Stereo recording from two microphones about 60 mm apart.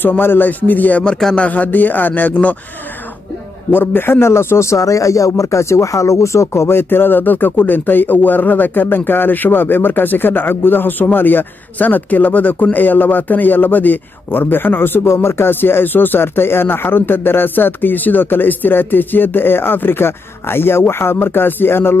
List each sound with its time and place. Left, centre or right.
0.0 s speech: left
1.0 s speech: centre
3.7 s a man's voice: left